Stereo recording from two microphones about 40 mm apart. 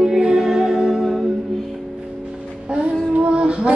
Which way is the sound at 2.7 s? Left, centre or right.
Right.